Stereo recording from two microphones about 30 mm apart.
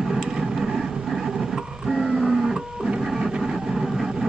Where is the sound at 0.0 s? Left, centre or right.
Centre.